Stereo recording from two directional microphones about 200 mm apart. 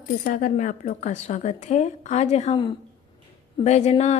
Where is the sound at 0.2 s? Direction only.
40° left (ahead or behind).